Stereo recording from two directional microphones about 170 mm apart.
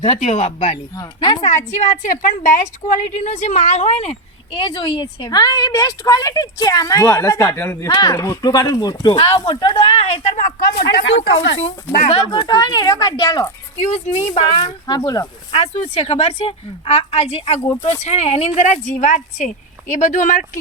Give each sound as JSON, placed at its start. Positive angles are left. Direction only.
{"t": 0.0, "sound": "a woman's voice", "side_deg": 40}
{"t": 0.9, "sound": "a woman's voice", "side_deg": 25}
{"t": 1.5, "sound": "a woman's voice", "side_deg": 45}
{"t": 7.9, "sound": "a woman's voice", "side_deg": 25}
{"t": 9.1, "sound": "a woman's voice", "side_deg": 35}
{"t": 10.8, "sound": "speech", "side_deg": 90}
{"t": 12.3, "sound": "a woman's voice", "side_deg": 25}
{"t": 13.8, "sound": "a woman's voice", "side_deg": 40}
{"t": 15.5, "sound": "a woman's voice", "side_deg": 40}